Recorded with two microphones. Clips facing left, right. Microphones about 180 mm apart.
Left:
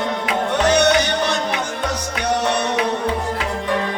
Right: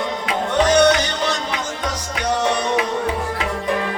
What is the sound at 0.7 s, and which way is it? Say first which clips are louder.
Music: right 1 dB; 60° left (ahead or behind).